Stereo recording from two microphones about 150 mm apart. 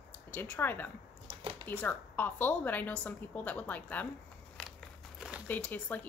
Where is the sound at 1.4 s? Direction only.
35° right (ahead or behind).